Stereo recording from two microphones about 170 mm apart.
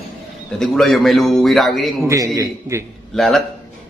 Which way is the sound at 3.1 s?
Centre (ahead or behind).